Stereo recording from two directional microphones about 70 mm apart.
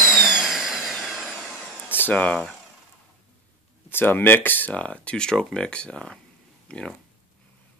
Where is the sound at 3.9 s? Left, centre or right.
Left.